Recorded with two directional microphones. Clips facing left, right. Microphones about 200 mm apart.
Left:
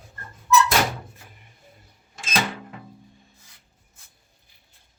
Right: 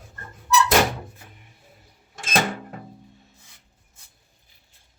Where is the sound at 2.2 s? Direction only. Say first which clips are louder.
Right 3 dB; 45° right (ahead or behind).